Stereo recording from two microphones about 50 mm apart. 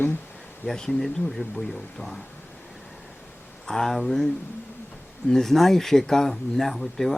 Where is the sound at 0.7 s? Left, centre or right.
Centre.